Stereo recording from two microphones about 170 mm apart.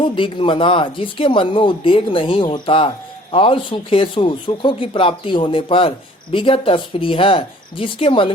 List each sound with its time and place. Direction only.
0.0 s speech: 30° left (ahead or behind)